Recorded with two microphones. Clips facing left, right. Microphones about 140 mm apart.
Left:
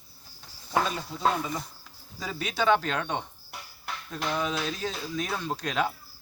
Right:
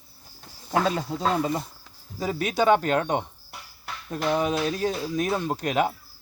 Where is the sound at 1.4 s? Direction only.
30° right (ahead or behind).